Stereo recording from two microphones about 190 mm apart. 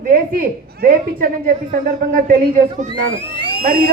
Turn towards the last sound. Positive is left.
turn(degrees=-50)  # may be behind; listen again after turning